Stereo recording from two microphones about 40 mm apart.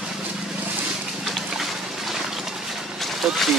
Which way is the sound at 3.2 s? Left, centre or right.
Centre.